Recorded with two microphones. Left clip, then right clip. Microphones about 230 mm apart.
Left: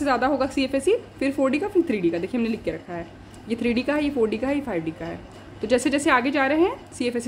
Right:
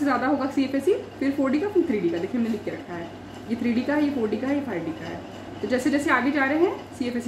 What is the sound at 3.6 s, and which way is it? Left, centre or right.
Speech, left.